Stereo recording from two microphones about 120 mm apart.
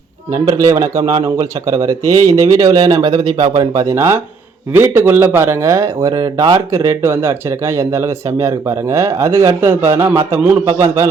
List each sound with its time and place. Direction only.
0.4 s speech: 30° right (ahead or behind)
6.7 s speech: 25° right (ahead or behind)